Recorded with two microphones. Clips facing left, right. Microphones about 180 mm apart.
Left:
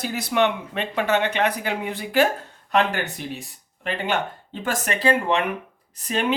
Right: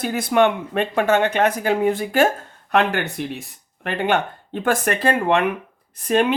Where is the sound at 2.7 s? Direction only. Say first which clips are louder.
Right 2 dB; 60° right (ahead or behind).